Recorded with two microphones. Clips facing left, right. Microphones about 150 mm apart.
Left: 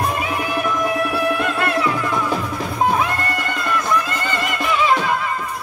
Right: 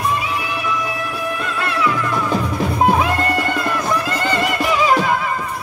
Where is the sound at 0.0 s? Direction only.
50° left (ahead or behind).